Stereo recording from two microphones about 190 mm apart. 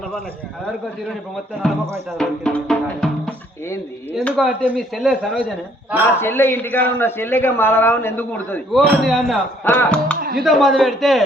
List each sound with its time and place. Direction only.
1.6 s speech: 5° left (ahead or behind)
6.1 s a man's voice: 10° left (ahead or behind)
10.2 s music: 50° right (ahead or behind)
10.4 s speech: centre (ahead or behind)